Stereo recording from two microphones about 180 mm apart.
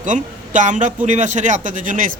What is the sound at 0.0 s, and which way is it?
Speech, 45° right (ahead or behind).